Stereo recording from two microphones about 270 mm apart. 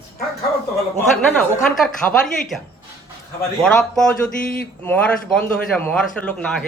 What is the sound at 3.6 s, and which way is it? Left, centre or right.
A man's voice, centre.